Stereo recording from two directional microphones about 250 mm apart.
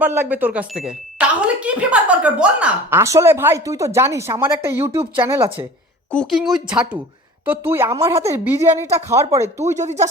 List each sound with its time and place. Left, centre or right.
0.0 s speech: centre
6.1 s speech: centre
9.7 s speech: right